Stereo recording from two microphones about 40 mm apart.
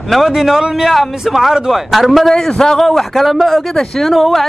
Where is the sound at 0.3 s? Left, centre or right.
Centre.